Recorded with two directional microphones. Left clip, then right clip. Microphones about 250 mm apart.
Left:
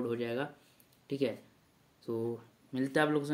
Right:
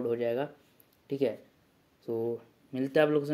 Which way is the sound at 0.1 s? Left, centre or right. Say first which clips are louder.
Right 5 dB; centre.